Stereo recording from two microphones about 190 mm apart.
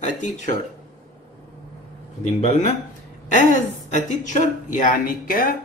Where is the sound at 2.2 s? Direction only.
35° left (ahead or behind).